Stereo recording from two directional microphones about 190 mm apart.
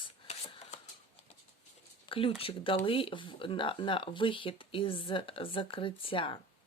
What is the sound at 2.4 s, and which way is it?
Speech, 30° left (ahead or behind).